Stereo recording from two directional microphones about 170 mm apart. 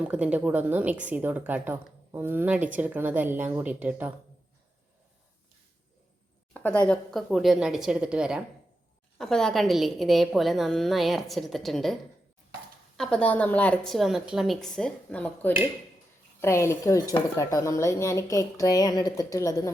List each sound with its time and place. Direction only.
0.0 s a woman's voice: 10° right (ahead or behind)
6.5 s a woman's voice: 5° left (ahead or behind)
13.0 s a woman's voice: 5° left (ahead or behind)